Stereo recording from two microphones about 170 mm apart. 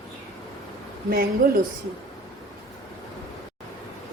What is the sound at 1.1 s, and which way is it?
Speech, 60° right (ahead or behind).